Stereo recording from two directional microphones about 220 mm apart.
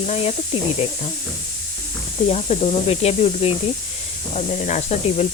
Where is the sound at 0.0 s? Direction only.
25° left (ahead or behind).